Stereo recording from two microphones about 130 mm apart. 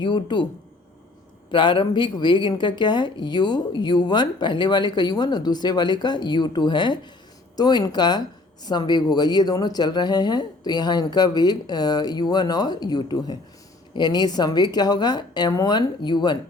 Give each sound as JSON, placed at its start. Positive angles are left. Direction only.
{"t": 0.0, "sound": "speech", "side_deg": 35}
{"t": 1.5, "sound": "speech", "side_deg": 40}